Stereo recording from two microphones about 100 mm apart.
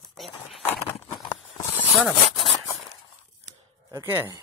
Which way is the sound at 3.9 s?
20° right (ahead or behind).